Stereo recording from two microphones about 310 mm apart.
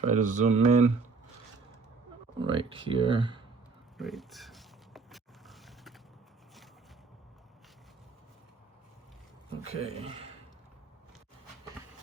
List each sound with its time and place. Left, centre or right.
0.0 s speech: right
2.4 s speech: centre
3.9 s a sound: centre
9.7 s speech: centre